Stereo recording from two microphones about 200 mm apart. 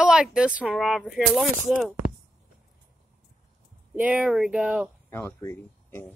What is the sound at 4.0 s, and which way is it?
Speech, 5° right (ahead or behind).